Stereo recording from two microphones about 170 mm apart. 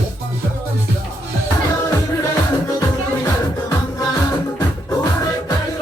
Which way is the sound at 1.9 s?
20° left (ahead or behind).